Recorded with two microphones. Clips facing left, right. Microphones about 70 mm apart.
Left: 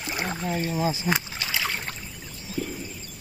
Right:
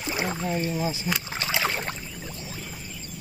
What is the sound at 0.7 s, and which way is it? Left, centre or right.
Speech, left.